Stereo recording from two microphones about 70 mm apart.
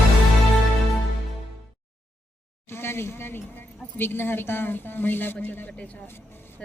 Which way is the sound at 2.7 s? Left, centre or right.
Left.